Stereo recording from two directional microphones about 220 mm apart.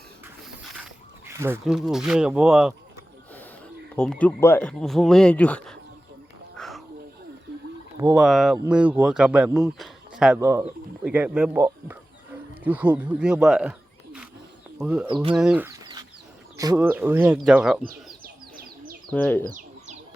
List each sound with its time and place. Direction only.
1.3 s speech: 10° right (ahead or behind)
3.9 s speech: 5° left (ahead or behind)
6.6 s a sound: centre (ahead or behind)
8.1 s speech: centre (ahead or behind)
15.0 s speech: 20° right (ahead or behind)
15.4 s chicken: 5° right (ahead or behind)
16.6 s speech: 10° right (ahead or behind)
18.2 s bird: 40° right (ahead or behind)
19.1 s speech: 10° left (ahead or behind)
19.5 s bird: 35° right (ahead or behind)